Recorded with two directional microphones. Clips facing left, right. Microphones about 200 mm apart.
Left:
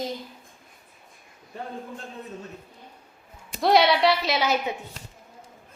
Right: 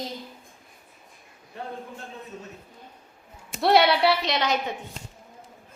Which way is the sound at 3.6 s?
Centre (ahead or behind).